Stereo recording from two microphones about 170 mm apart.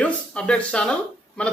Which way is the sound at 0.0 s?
5° left (ahead or behind).